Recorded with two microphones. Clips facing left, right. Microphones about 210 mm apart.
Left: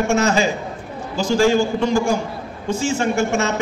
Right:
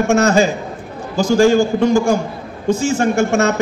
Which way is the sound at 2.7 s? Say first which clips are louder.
Right 4 dB; 40° right (ahead or behind).